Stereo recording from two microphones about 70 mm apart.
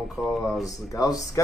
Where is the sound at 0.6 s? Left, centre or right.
Left.